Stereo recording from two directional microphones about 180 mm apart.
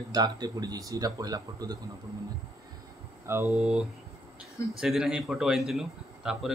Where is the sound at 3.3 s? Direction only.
10° right (ahead or behind).